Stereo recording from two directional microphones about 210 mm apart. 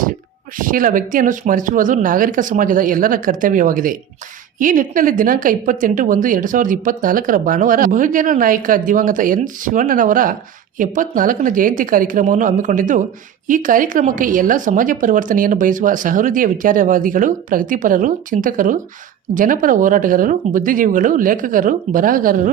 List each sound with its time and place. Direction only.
0.5 s speech: 40° right (ahead or behind)